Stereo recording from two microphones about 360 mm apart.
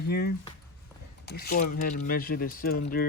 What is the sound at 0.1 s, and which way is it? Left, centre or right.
Speech, left.